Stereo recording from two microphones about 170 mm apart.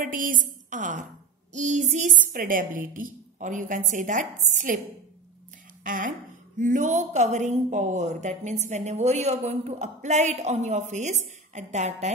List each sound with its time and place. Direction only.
0.0 s a woman's voice: 50° right (ahead or behind)
5.9 s a woman's voice: 55° right (ahead or behind)